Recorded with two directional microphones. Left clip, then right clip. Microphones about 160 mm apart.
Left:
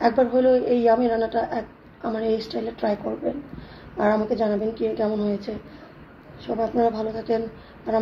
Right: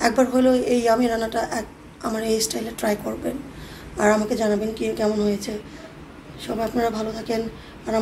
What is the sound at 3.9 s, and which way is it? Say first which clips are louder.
A woman's voice: right 2 dB; 35° left (ahead or behind).